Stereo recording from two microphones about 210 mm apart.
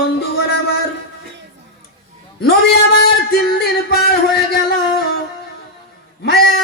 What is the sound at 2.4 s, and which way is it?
Speech, 50° left (ahead or behind).